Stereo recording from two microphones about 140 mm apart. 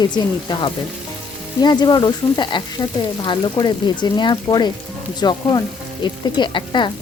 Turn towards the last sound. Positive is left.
turn(degrees=35)  # may be behind; listen again after turning